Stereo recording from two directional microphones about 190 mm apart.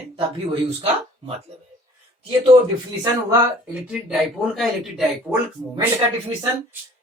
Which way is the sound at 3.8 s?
5° right (ahead or behind).